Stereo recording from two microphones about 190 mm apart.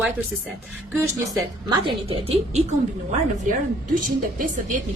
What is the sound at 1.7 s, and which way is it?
A woman's voice, 25° right (ahead or behind).